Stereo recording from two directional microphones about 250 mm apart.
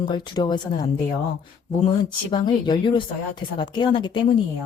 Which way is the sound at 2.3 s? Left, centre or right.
Centre.